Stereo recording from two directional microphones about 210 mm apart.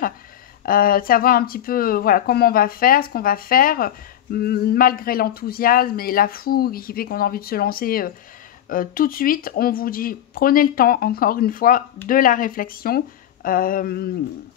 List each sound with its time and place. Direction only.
0.7 s speech: 45° left (ahead or behind)